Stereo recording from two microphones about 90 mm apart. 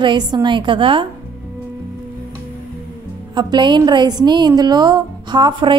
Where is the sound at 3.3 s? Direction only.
55° right (ahead or behind).